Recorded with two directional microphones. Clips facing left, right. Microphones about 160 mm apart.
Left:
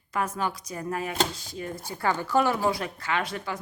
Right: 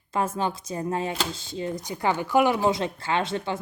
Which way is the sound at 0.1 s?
25° right (ahead or behind).